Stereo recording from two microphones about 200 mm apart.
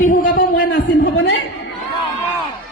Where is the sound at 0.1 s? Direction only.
45° left (ahead or behind).